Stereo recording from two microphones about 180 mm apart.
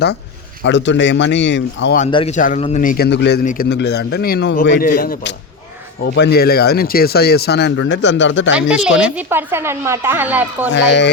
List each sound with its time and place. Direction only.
0.6 s speech: 85° left
2.0 s a man's voice: 30° left (ahead or behind)
2.3 s a man's voice: 45° left (ahead or behind)
2.8 s a man's voice: 50° left (ahead or behind)
3.1 s a man's voice: 70° left (ahead or behind)
3.4 s a man's voice: 45° left (ahead or behind)
3.7 s a man's voice: 70° left (ahead or behind)
4.8 s a man's voice: 55° left (ahead or behind)
6.0 s speech: 65° left (ahead or behind); by 8.5 s 90° left
8.5 s a woman's voice: 5° right (ahead or behind)
10.7 s a man's voice: 80° left